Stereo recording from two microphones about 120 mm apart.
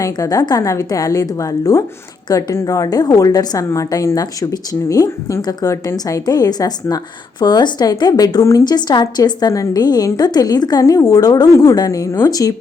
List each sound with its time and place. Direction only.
0.0 s a woman's voice: 30° left (ahead or behind)